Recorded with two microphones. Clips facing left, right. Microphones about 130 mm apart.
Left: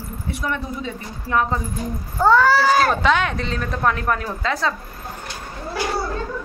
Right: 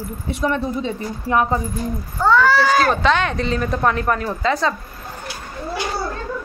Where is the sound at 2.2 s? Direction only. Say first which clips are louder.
Even; 40° left (ahead or behind).